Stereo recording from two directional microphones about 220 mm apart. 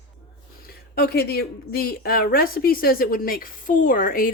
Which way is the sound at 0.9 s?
45° left (ahead or behind).